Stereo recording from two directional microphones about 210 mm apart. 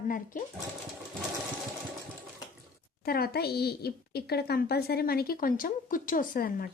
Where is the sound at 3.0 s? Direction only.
45° left (ahead or behind).